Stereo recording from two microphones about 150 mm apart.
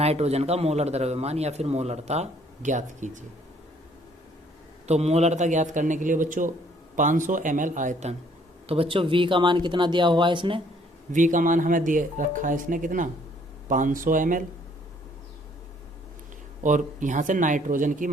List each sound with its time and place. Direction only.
0.0 s a man's voice: 45° right (ahead or behind)
4.9 s speech: 45° right (ahead or behind)
8.6 s speech: 40° right (ahead or behind)
11.1 s speech: 60° right (ahead or behind)
16.6 s speech: 55° right (ahead or behind)